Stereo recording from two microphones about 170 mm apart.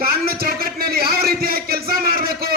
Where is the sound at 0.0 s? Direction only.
65° right (ahead or behind).